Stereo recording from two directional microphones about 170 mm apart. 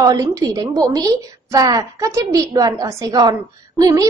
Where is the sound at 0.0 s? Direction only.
20° right (ahead or behind).